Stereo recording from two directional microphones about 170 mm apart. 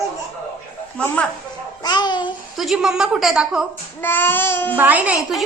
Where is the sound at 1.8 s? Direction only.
25° left (ahead or behind).